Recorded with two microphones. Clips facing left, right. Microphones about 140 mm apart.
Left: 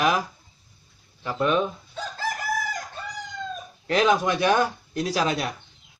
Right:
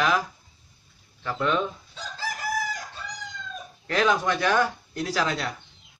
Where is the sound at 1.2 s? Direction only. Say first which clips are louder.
Left 3 dB; 15° left (ahead or behind).